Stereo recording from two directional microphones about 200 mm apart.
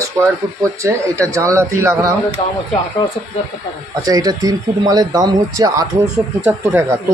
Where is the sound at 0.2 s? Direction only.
15° right (ahead or behind).